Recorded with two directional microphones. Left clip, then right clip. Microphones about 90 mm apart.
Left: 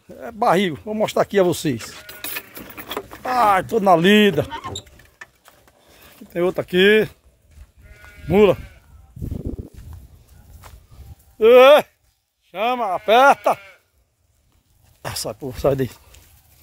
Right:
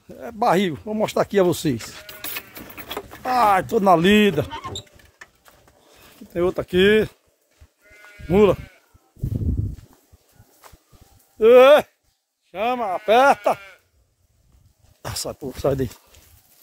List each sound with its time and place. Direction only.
0.1 s speech: 10° right (ahead or behind)
3.3 s speech: 25° right (ahead or behind)
4.0 s speech: 5° right (ahead or behind)
5.9 s speech: 5° left (ahead or behind)
8.3 s speech: centre (ahead or behind)
11.3 s speech: centre (ahead or behind)
15.0 s a sound: centre (ahead or behind)
15.4 s speech: 15° left (ahead or behind)